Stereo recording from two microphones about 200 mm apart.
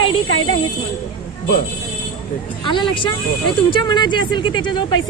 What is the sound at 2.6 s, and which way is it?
Speech, 25° left (ahead or behind).